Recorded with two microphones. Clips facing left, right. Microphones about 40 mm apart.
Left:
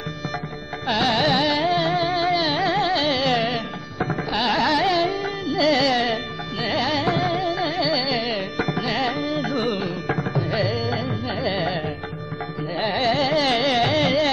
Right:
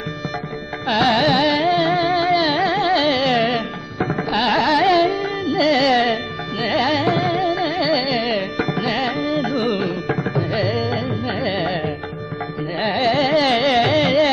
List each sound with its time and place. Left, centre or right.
0.8 s music: right
2.6 s carnatic music: centre
2.9 s music: right
11.2 s carnatic music: right
11.5 s music: right
12.9 s carnatic music: right